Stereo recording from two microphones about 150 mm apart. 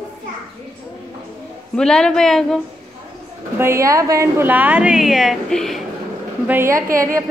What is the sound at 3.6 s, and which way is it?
A woman's voice, 20° right (ahead or behind).